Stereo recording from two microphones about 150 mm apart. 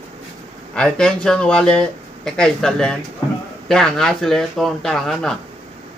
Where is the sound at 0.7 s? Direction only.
5° left (ahead or behind).